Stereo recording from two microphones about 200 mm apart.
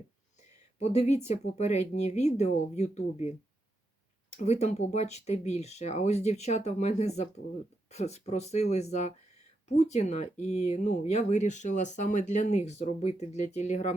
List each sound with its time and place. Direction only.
0.8 s speech: 35° left (ahead or behind)